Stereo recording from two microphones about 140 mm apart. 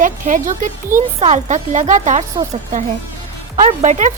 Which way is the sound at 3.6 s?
55° right (ahead or behind).